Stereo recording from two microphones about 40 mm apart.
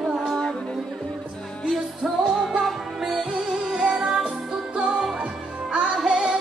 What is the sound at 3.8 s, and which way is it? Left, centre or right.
Music, centre.